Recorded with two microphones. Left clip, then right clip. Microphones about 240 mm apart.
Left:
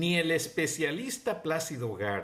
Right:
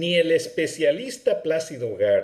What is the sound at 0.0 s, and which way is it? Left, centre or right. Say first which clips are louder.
Speech: right 8 dB; centre.